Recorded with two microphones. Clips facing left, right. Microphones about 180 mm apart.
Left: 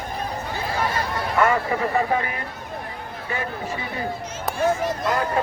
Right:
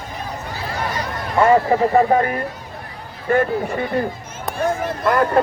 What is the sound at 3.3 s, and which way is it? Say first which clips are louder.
Speech: right 11 dB; 55° right (ahead or behind).